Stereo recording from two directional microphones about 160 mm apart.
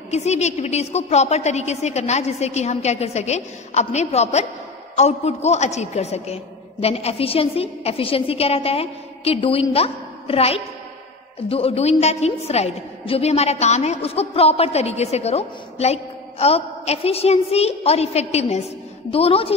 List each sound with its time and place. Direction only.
0.1 s a woman's voice: 45° left (ahead or behind)